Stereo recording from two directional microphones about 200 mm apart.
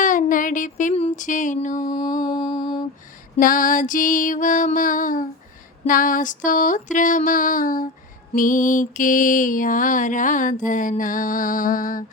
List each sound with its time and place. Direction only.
0.0 s music: 40° left (ahead or behind)
1.9 s mantra: 20° left (ahead or behind)
2.2 s music: 20° left (ahead or behind)
3.3 s music: 40° left (ahead or behind)